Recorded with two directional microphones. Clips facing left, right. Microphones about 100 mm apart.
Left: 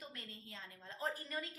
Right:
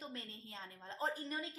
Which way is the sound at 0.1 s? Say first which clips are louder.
Right 3 dB; 30° right (ahead or behind).